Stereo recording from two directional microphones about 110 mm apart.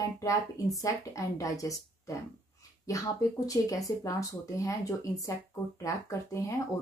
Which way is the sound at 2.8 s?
30° left (ahead or behind).